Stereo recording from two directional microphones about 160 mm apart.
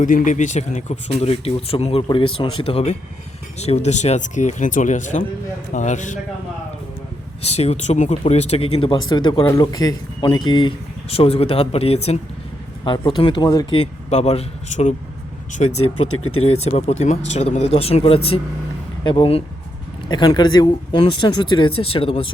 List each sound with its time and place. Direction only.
0.0 s speech: 50° left (ahead or behind)
7.4 s speech: 40° left (ahead or behind)